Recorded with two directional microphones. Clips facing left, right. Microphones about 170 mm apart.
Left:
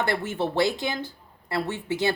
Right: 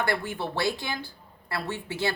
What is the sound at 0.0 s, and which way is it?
Speech, 20° left (ahead or behind).